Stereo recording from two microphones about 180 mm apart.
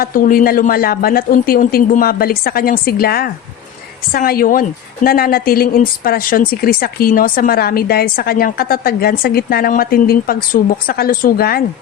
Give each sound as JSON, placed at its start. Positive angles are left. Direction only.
{"t": 0.0, "sound": "a woman's voice", "side_deg": 50}